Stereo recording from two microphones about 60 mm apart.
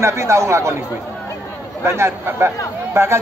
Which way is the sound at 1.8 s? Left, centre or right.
Right.